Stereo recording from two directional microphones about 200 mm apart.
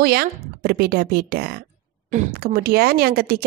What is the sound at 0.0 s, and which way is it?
A woman's voice, 50° right (ahead or behind).